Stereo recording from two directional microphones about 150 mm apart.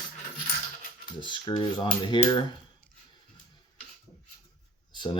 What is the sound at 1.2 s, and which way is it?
Speech, 30° left (ahead or behind).